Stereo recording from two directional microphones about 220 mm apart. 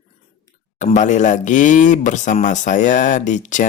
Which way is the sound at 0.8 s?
35° left (ahead or behind).